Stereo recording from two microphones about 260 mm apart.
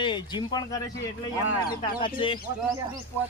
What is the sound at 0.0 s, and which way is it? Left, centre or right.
Speech, centre.